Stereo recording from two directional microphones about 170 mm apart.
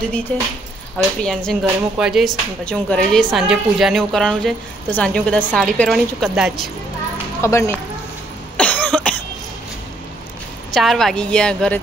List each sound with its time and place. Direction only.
0.3 s speech: 10° left (ahead or behind)
7.4 s speech: 15° left (ahead or behind)
8.5 s cough: 5° left (ahead or behind)
10.7 s speech: centre (ahead or behind)